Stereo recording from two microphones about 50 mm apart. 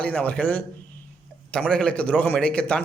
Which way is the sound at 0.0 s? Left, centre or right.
Left.